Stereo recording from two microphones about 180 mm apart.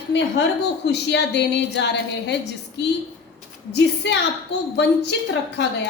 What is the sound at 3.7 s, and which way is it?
A woman's voice, 70° left (ahead or behind).